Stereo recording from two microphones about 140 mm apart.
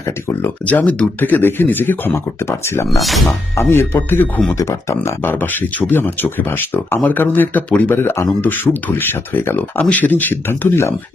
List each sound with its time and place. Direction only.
0.0 s speech: 15° left (ahead or behind)
3.0 s speech: centre (ahead or behind)
3.2 s speech: 15° left (ahead or behind)